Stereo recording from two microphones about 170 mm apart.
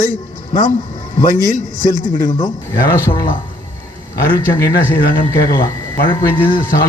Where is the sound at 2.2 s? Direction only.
25° left (ahead or behind).